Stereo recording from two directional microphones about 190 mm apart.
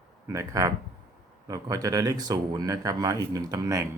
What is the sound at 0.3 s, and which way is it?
Speech, 15° right (ahead or behind).